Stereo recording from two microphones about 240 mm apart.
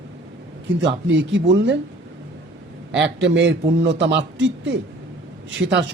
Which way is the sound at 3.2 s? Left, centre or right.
Right.